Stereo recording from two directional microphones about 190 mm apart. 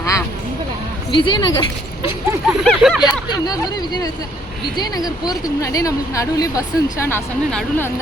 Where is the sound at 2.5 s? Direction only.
Centre (ahead or behind).